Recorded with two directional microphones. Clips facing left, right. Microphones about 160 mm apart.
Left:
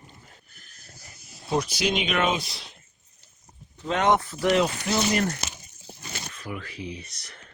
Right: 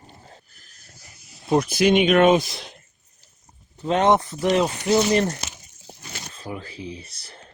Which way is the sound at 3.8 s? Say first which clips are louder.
Right 4 dB; 30° right (ahead or behind).